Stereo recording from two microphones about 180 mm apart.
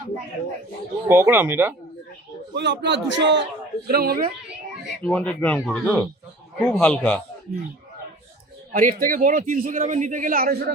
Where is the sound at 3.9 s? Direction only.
55° right (ahead or behind).